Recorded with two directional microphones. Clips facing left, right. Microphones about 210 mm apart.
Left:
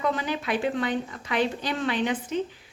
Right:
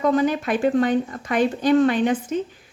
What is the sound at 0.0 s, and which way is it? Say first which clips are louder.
A woman's voice: right 8 dB; 45° right (ahead or behind).